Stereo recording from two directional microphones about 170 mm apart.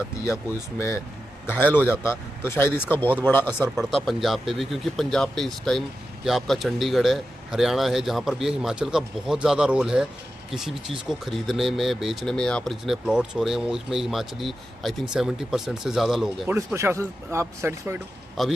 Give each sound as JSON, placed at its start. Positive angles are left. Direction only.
{"t": 0.8, "sound": "speech", "side_deg": 15}
{"t": 3.8, "sound": "speech", "side_deg": 0}
{"t": 16.5, "sound": "a man's voice", "side_deg": -15}
{"t": 18.4, "sound": "speech", "side_deg": 0}